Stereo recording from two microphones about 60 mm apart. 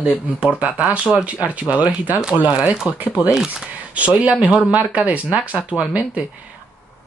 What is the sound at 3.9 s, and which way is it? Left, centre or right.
Speech, right.